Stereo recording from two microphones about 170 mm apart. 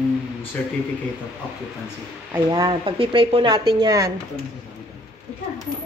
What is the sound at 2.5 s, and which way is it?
Speech, 30° right (ahead or behind).